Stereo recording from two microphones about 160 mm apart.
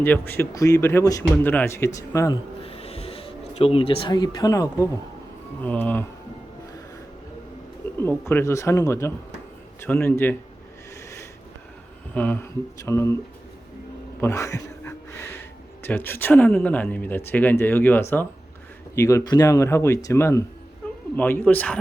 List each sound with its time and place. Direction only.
0.0 s speech: 15° left (ahead or behind)
2.6 s a sound: 40° left (ahead or behind); by 4.9 s 20° left (ahead or behind)
5.6 s speech: 10° left (ahead or behind)
7.9 s speech: 15° left (ahead or behind)
12.1 s speech: 10° left (ahead or behind)
14.2 s a sound: 15° left (ahead or behind)
15.9 s speech: 15° left (ahead or behind)